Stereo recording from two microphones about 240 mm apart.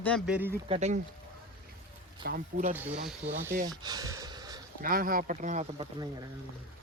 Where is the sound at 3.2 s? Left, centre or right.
Centre.